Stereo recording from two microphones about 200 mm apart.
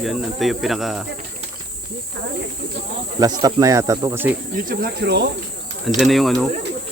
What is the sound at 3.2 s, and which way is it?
Speech, 20° right (ahead or behind).